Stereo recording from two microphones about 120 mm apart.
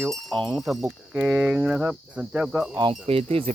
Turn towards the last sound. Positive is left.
turn(degrees=-55)  # may be behind; listen again after turning